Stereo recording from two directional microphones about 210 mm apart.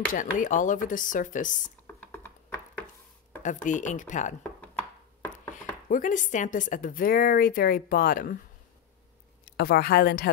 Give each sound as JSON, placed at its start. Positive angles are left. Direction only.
{"t": 0.1, "sound": "a woman's voice", "side_deg": 40}
{"t": 2.0, "sound": "a sound", "side_deg": 10}
{"t": 3.4, "sound": "a woman's voice", "side_deg": 35}
{"t": 5.9, "sound": "a woman's voice", "side_deg": 40}
{"t": 9.6, "sound": "speech", "side_deg": 45}